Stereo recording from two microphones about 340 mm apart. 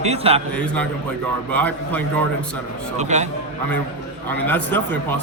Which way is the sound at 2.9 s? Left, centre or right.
Right.